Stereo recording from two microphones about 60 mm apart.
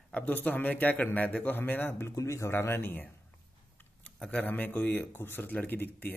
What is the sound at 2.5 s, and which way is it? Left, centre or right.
Speech, left.